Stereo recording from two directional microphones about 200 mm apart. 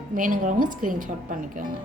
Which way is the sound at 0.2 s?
40° right (ahead or behind).